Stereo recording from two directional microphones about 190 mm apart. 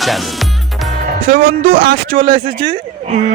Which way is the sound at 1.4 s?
55° right (ahead or behind).